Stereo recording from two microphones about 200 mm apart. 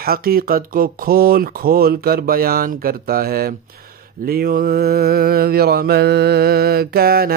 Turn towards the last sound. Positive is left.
turn(degrees=-50)  # may be behind; listen again after turning